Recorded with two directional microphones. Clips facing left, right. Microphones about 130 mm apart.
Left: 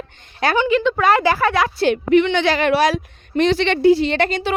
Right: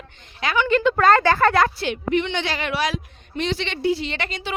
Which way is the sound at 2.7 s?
40° left (ahead or behind).